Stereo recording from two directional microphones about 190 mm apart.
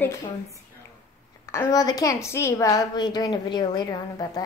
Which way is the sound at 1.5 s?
15° left (ahead or behind).